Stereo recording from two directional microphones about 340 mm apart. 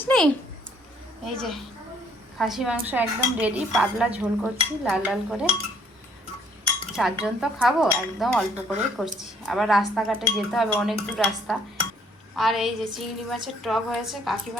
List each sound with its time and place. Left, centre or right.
0.0 s a sound: centre
1.2 s dishes: centre
6.9 s dishes: centre
12.4 s dishes: centre